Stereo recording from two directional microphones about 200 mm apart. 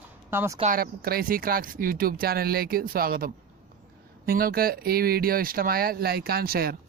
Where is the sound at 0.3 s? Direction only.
15° right (ahead or behind).